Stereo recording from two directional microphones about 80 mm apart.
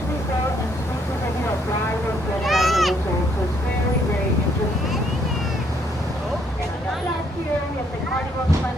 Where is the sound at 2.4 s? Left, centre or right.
Centre.